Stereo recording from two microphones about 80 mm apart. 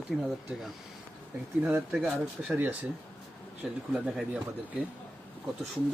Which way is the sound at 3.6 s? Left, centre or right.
Centre.